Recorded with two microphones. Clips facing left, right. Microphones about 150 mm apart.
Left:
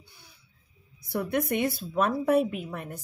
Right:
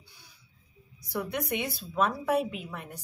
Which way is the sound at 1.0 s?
50° left (ahead or behind).